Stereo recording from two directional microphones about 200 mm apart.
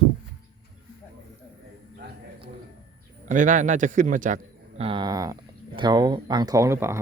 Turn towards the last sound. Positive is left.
turn(degrees=-15)  # may be behind; listen again after turning